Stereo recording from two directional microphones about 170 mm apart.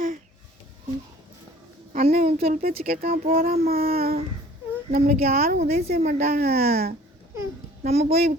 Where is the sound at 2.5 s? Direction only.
60° right (ahead or behind).